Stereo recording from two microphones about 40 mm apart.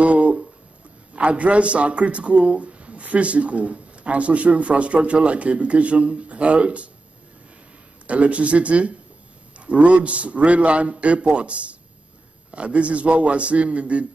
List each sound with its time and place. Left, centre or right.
0.0 s a sound: right
1.1 s speech: right
8.1 s speech: right